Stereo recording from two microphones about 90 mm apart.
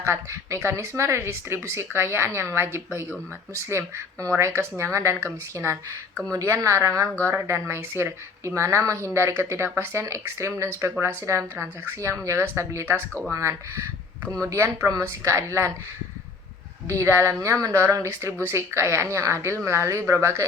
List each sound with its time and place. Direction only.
0.0 s a woman's voice: 30° right (ahead or behind)
16.9 s a woman's voice: 35° right (ahead or behind)